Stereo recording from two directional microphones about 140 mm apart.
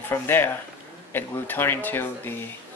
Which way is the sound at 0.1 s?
15° left (ahead or behind).